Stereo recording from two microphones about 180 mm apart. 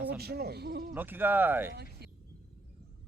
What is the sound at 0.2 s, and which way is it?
Speech, 60° right (ahead or behind).